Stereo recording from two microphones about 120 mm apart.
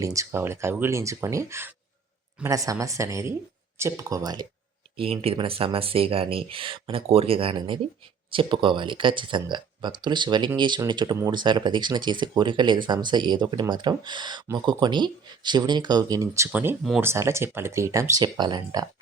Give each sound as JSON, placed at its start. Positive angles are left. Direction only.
{"t": 0.0, "sound": "speech", "side_deg": -25}
{"t": 4.9, "sound": "speech", "side_deg": -50}
{"t": 16.5, "sound": "speech", "side_deg": -15}